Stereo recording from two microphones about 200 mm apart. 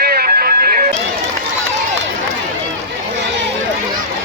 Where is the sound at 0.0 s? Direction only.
50° right (ahead or behind).